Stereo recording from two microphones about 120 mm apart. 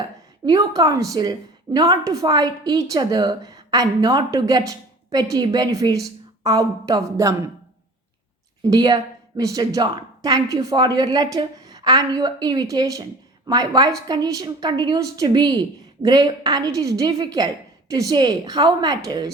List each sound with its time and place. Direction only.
0.4 s a woman's voice: 35° right (ahead or behind)
8.6 s a woman's voice: 35° right (ahead or behind)